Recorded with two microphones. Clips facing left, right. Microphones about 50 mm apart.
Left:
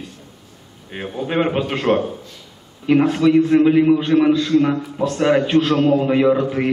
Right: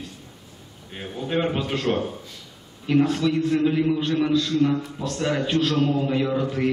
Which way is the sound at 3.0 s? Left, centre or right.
Left.